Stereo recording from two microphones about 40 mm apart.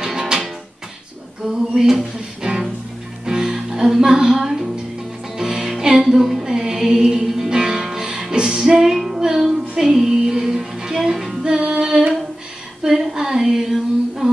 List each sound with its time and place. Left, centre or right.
0.0 s music: centre
1.7 s speech: centre
3.3 s music: centre
8.7 s female singing: centre
9.4 s music: centre
11.7 s humming: centre
12.8 s female singing: centre